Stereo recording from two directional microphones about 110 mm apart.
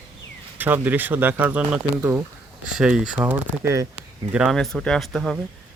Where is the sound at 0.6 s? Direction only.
15° right (ahead or behind).